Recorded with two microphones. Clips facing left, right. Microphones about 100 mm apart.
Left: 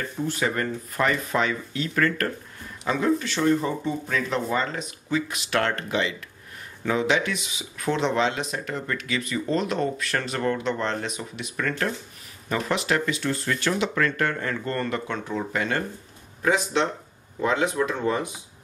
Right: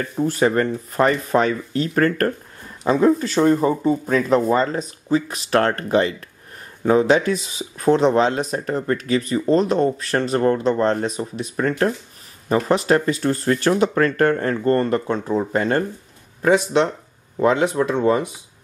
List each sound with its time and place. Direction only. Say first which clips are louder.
0.4 s speech: right 9 dB; 35° right (ahead or behind)
17.4 s speech: right 6 dB; 35° right (ahead or behind)